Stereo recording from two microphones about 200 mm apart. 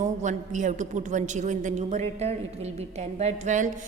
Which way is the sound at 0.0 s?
35° right (ahead or behind).